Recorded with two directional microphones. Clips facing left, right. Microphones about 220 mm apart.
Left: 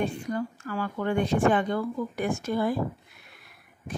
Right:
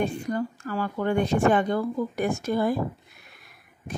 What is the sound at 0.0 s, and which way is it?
Speech, 40° right (ahead or behind).